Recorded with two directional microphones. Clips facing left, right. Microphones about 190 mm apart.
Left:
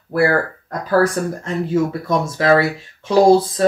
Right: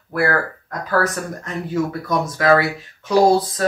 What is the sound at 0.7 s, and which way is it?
Speech, 30° left (ahead or behind).